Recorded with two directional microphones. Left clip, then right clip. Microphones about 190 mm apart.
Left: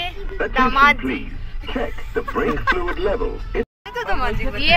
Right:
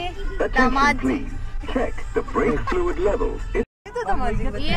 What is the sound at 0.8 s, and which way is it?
Speech, 30° right (ahead or behind).